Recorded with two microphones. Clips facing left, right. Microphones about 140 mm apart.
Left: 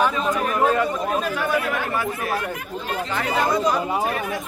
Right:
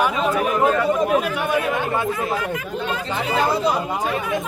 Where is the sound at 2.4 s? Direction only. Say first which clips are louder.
Right 4 dB; 90° right.